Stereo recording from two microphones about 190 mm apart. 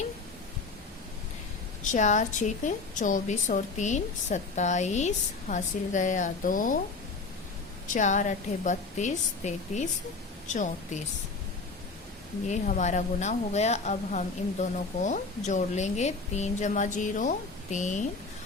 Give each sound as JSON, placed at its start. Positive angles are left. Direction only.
{"t": 1.8, "sound": "a woman's voice", "side_deg": 40}
{"t": 7.9, "sound": "a woman's voice", "side_deg": 40}
{"t": 12.5, "sound": "a woman's voice", "side_deg": 40}